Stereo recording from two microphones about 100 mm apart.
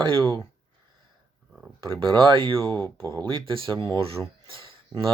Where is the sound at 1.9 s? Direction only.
55° right (ahead or behind).